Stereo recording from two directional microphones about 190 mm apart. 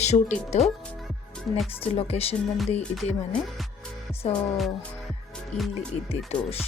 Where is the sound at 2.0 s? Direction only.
30° left (ahead or behind).